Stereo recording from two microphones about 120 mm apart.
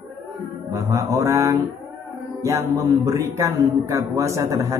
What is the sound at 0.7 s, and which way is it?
Speech, 25° right (ahead or behind).